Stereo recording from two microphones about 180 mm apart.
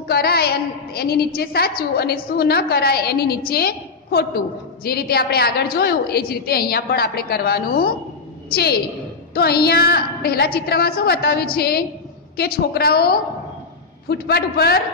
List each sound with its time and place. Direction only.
0.1 s a woman's voice: 60° left (ahead or behind)